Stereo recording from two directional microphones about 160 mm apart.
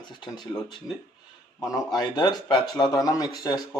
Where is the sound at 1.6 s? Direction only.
25° left (ahead or behind).